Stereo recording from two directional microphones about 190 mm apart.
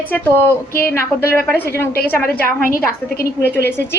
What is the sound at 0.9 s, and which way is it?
A woman's voice, 10° left (ahead or behind).